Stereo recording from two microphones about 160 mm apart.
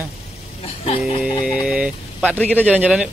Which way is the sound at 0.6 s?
40° left (ahead or behind).